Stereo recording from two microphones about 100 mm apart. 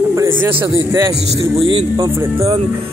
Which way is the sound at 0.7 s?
30° right (ahead or behind).